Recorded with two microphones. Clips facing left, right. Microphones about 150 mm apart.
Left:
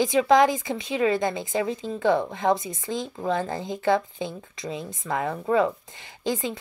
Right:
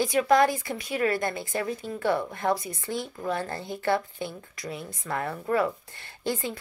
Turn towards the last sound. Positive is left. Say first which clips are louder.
# left 3 dB
turn(degrees=15)  # may be behind; listen again after turning